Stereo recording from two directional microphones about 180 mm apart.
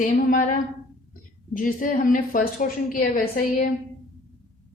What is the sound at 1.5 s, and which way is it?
A woman's voice, 50° left (ahead or behind).